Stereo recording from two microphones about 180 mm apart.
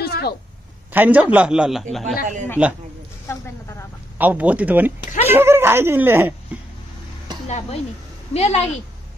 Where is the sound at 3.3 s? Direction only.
15° left (ahead or behind).